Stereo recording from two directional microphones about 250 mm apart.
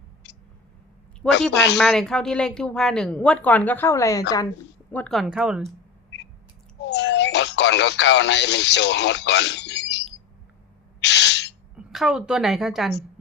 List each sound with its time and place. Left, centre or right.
0.2 s cat: left
1.3 s a woman's voice: left
1.8 s speech: centre
6.9 s speech: left
11.0 s owl: left
11.8 s a woman's voice: centre